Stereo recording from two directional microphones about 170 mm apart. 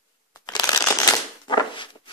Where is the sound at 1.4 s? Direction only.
25° left (ahead or behind).